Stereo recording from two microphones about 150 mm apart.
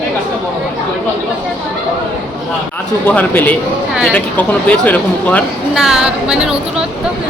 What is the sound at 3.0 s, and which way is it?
Speech, 10° left (ahead or behind).